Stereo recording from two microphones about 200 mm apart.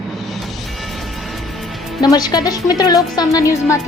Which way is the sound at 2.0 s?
20° left (ahead or behind).